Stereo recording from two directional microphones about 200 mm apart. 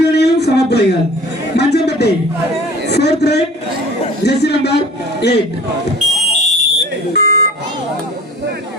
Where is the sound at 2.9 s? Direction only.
55° left (ahead or behind).